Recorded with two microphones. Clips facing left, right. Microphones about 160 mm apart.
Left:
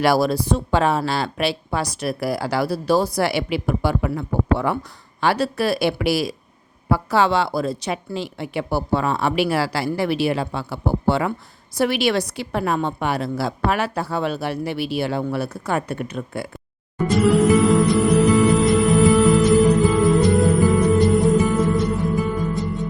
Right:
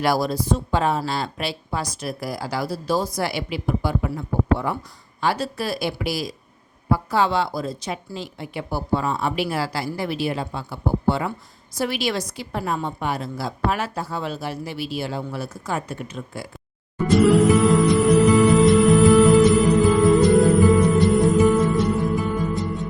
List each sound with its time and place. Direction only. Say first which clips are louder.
0.0 s speech: left 4 dB; 70° left (ahead or behind)
17.1 s music: right 1 dB; centre (ahead or behind)